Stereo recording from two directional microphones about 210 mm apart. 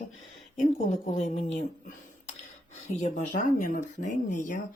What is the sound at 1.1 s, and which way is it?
Speech, 30° left (ahead or behind).